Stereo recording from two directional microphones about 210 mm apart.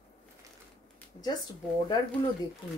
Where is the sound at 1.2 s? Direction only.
20° left (ahead or behind).